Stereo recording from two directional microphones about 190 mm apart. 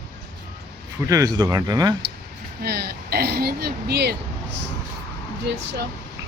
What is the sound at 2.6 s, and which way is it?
Speech, 55° right (ahead or behind).